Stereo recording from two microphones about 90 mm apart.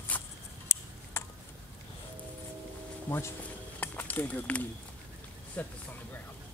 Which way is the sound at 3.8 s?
20° left (ahead or behind).